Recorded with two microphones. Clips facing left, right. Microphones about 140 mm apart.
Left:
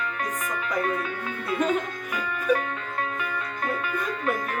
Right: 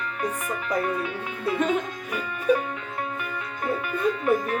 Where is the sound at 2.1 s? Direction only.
25° right (ahead or behind).